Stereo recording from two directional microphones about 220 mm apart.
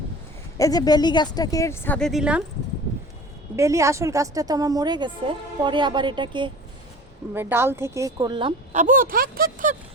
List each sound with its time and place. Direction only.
0.5 s speech: 15° left (ahead or behind); by 2.4 s 5° right (ahead or behind)
3.5 s a woman's voice: 15° right (ahead or behind)
7.3 s a woman's voice: 10° right (ahead or behind); by 9.7 s 40° right (ahead or behind)